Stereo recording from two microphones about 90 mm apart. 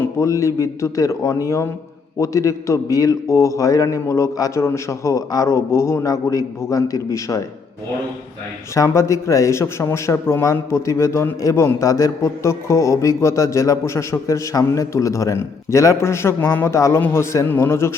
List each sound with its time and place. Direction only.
0.0 s a man's voice: 30° left (ahead or behind)
8.7 s a man's voice: 35° left (ahead or behind)
16.7 s a man's voice: 35° left (ahead or behind)